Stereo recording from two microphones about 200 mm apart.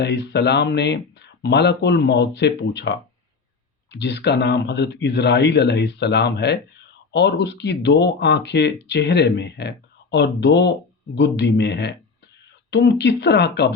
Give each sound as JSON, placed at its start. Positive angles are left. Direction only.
{"t": 0.0, "sound": "speech", "side_deg": 60}